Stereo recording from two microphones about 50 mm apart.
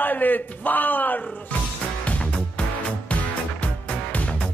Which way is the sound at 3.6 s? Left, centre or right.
Left.